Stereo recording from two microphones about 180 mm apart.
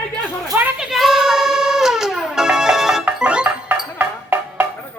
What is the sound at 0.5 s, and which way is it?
Music, 5° right (ahead or behind).